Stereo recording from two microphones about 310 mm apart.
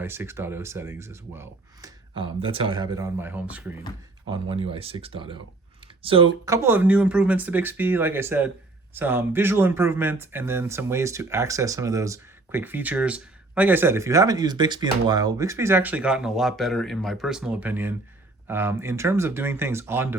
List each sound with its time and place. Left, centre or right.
0.0 s speech: centre
4.3 s speech: centre